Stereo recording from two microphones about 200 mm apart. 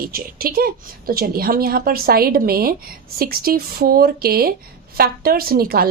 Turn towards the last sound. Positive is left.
turn(degrees=-50)  # may be behind; listen again after turning